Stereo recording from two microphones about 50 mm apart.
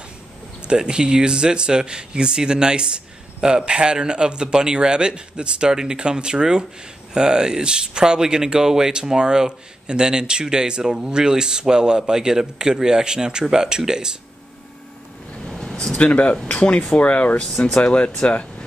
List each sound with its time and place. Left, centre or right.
0.7 s speech: centre
15.4 s a sound: centre
16.4 s speech: left